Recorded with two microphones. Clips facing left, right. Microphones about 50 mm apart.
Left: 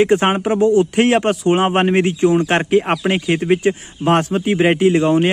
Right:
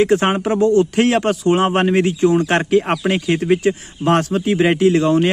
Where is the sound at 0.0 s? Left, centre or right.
Left.